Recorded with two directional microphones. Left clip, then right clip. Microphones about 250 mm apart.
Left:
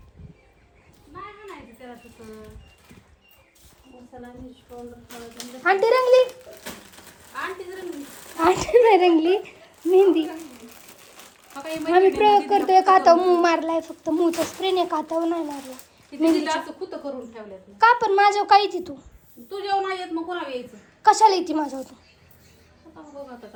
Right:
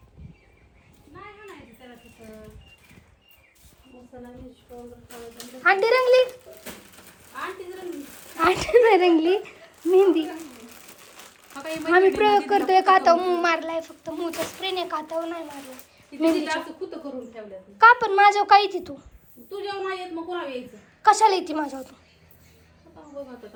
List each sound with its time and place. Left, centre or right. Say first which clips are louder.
1.1 s a sound: left 4 dB; centre
4.8 s speech: left 2 dB; centre
5.8 s a child's voice: left 3 dB; centre
6.2 s speech: left 1 dB; centre
8.7 s speech: left 1 dB; centre
12.8 s a child's voice: left 2 dB; centre
16.1 s speech: left 2 dB; centre
17.7 s a child's voice: right 1 dB; centre
21.0 s a child's voice: left 2 dB; centre